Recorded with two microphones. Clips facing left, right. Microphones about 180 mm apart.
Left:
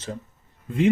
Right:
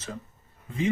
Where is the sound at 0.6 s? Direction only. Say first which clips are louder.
Left 7 dB; 65° left (ahead or behind).